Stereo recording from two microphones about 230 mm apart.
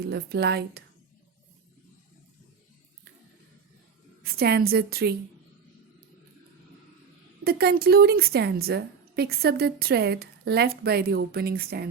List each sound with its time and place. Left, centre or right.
0.1 s a woman's voice: right
4.2 s a woman's voice: right
7.4 s a woman's voice: right